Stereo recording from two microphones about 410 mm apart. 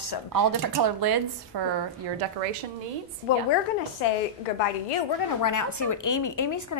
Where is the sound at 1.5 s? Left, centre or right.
Right.